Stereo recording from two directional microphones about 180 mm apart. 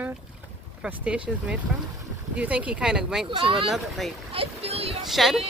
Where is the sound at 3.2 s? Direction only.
30° right (ahead or behind).